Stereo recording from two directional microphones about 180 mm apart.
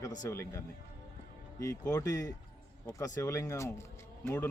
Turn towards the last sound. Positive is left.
turn(degrees=10)  # may be behind; listen again after turning